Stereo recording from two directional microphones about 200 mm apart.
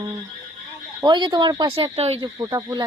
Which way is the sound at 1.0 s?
20° right (ahead or behind).